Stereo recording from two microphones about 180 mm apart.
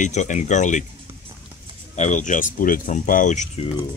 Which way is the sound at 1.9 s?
40° left (ahead or behind).